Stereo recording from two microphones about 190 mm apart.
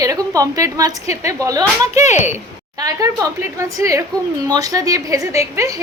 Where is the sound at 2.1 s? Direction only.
40° left (ahead or behind).